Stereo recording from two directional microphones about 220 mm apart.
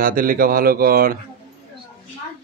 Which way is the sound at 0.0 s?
40° right (ahead or behind).